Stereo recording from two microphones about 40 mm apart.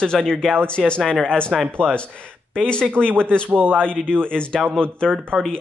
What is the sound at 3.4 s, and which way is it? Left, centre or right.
Speech, right.